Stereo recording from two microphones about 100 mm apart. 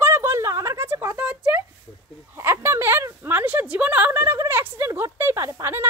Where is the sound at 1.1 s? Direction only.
15° right (ahead or behind).